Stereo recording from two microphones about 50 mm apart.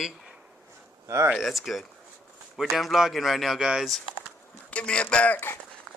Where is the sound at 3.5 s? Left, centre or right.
Centre.